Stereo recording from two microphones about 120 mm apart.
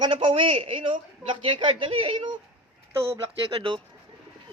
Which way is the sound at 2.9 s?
20° right (ahead or behind).